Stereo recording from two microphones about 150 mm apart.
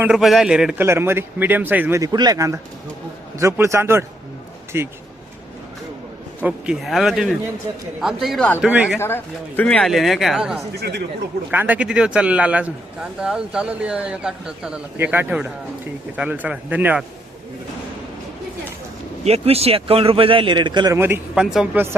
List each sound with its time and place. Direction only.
0.0 s speech: 5° right (ahead or behind)
0.9 s speech: 15° right (ahead or behind)
2.0 s a man's voice: 25° right (ahead or behind)
6.4 s speech: 5° right (ahead or behind)
9.0 s speech: 15° left (ahead or behind); by 10.6 s 5° right (ahead or behind)
10.7 s speech: 90° right
11.5 s speech: 10° right (ahead or behind)
19.2 s speech: 45° right (ahead or behind)
20.9 s speech: 15° right (ahead or behind)
21.3 s speech: 5° right (ahead or behind)